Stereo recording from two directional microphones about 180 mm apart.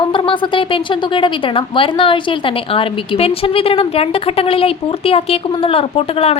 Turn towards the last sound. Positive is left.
turn(degrees=35)  # may be behind; listen again after turning